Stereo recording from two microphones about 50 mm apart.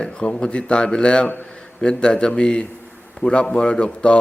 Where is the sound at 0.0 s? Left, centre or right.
Centre.